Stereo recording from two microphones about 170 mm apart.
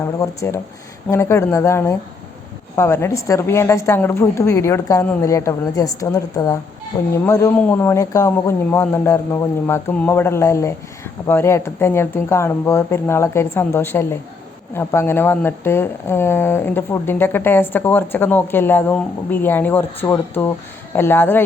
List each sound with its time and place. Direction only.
0.0 s a woman's voice: 20° left (ahead or behind)